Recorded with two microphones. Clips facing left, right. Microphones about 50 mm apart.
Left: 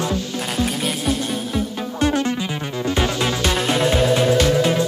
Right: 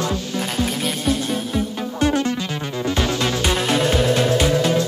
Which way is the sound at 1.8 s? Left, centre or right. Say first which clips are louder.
Even; left.